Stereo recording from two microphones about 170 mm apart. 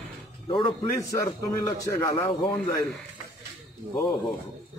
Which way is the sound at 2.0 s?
30° left (ahead or behind).